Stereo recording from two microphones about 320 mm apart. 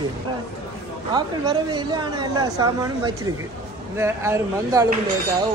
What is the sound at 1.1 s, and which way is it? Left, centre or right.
Speech, centre.